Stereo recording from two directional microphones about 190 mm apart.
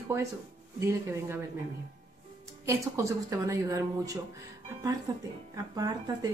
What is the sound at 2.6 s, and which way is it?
Speech, 15° right (ahead or behind).